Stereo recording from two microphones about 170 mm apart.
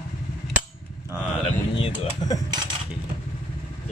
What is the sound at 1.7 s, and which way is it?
Speech, 25° left (ahead or behind).